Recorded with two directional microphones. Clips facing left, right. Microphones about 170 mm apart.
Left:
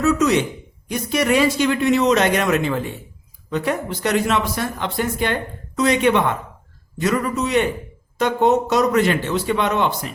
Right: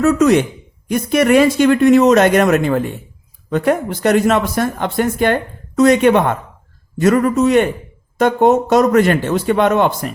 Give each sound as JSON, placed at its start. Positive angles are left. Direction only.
{"t": 0.0, "sound": "speech", "side_deg": -50}